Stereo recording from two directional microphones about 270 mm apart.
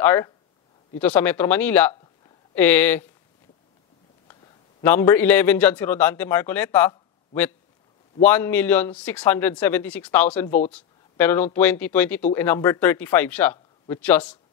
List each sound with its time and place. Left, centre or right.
0.0 s speech: centre
4.8 s speech: centre